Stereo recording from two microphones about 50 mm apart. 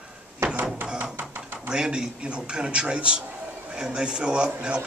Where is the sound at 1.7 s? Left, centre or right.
Centre.